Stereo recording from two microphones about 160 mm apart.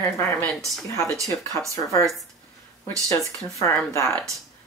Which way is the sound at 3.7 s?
10° left (ahead or behind).